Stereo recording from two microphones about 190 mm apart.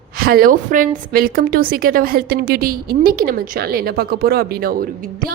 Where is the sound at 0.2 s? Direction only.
50° right (ahead or behind).